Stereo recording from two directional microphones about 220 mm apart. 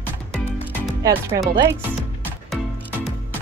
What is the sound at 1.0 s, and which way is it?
Speech, 15° right (ahead or behind).